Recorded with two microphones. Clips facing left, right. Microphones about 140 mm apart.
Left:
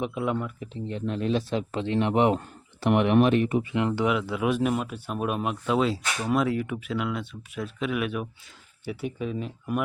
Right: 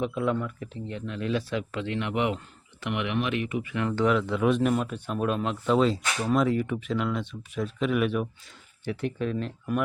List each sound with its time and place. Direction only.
0.0 s speech: 15° left (ahead or behind)
0.9 s a man's voice: 35° left (ahead or behind)
3.9 s speech: 10° left (ahead or behind)